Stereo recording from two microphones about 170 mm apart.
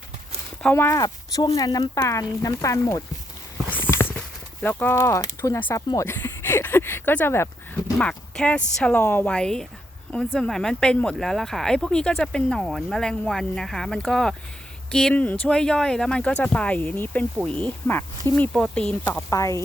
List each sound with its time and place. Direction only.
0.6 s speech: 10° left (ahead or behind)
4.6 s speech: 10° left (ahead or behind)
19.3 s speech: 20° left (ahead or behind)